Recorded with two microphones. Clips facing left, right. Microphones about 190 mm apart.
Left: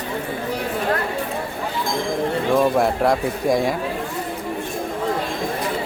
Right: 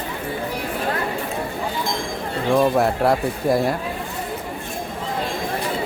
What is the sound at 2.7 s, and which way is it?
Speech, centre (ahead or behind).